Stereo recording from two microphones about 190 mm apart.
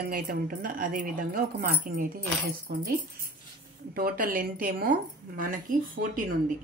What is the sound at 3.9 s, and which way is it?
A woman's voice, 50° right (ahead or behind).